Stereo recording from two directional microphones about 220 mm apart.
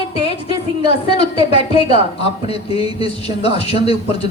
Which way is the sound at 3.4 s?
25° left (ahead or behind).